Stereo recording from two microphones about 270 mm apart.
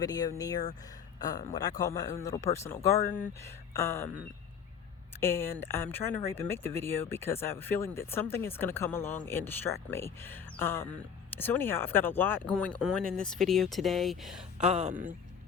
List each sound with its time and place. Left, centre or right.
0.0 s speech: centre
5.2 s speech: centre
14.7 s speech: right